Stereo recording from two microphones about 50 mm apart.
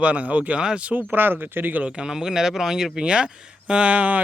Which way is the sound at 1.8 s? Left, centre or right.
Centre.